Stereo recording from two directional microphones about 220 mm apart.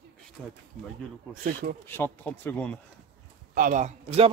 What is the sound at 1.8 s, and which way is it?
Speech, 10° left (ahead or behind).